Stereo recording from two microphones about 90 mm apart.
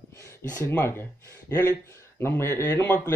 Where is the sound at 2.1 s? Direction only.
30° left (ahead or behind).